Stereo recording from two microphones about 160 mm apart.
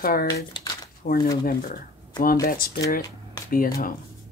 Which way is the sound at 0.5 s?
30° left (ahead or behind).